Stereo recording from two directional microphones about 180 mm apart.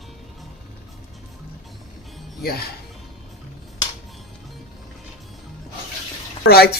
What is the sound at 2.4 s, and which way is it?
Speech, 55° left (ahead or behind).